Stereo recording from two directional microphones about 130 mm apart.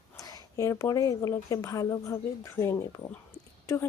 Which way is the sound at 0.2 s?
25° left (ahead or behind).